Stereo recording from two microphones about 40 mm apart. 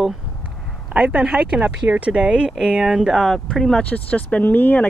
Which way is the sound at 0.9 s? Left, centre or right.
Right.